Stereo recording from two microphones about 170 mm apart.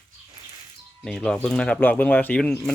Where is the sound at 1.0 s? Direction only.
5° left (ahead or behind).